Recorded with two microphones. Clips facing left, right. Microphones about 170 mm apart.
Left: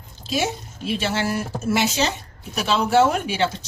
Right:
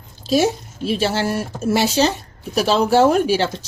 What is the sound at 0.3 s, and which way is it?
Speech, 35° right (ahead or behind).